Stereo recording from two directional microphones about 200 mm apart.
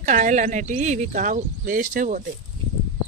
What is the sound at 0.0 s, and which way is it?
Speech, 35° right (ahead or behind).